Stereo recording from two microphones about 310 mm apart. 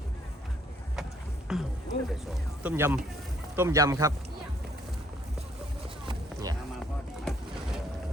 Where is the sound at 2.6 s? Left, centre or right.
Centre.